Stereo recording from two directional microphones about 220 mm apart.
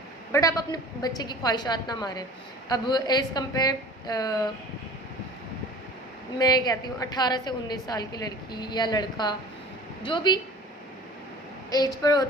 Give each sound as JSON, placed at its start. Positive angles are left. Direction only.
{"t": 0.3, "sound": "a woman's voice", "side_deg": 15}
{"t": 6.4, "sound": "a woman's voice", "side_deg": 15}
{"t": 11.7, "sound": "a woman's voice", "side_deg": 15}